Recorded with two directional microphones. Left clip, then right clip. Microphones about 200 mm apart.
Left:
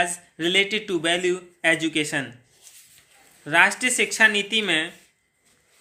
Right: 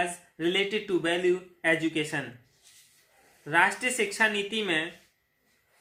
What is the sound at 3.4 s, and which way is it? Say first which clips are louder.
Speech: left 6 dB; 45° left (ahead or behind).